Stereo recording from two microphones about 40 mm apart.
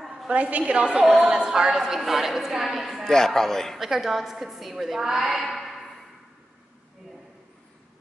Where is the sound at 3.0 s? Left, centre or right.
Centre.